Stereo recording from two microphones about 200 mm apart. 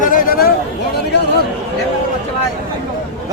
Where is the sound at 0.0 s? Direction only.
45° left (ahead or behind).